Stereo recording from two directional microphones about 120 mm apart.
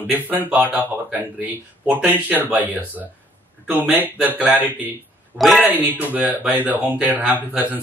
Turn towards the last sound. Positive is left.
turn(degrees=-15)  # may be behind; listen again after turning